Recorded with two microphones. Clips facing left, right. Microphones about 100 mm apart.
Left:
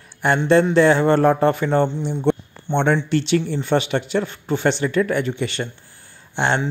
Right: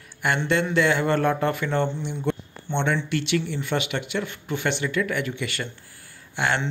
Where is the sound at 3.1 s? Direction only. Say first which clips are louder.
Left 6 dB; 30° left (ahead or behind).